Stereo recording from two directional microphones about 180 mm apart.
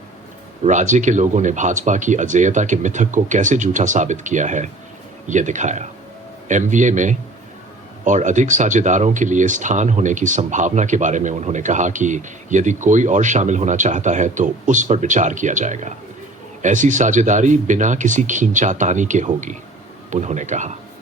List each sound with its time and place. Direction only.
0.6 s speech: 45° right (ahead or behind)